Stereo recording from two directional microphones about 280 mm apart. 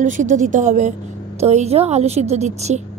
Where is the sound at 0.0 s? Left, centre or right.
Right.